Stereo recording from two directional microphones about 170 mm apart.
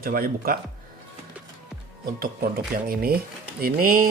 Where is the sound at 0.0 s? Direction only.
60° right (ahead or behind).